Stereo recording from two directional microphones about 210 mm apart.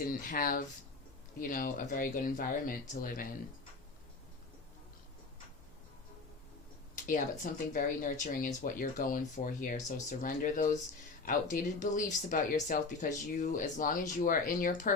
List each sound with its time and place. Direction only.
0.1 s speech: 40° left (ahead or behind)
7.7 s speech: 40° left (ahead or behind)